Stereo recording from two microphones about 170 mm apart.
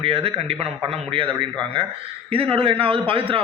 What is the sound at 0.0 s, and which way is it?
A man's voice, 35° right (ahead or behind).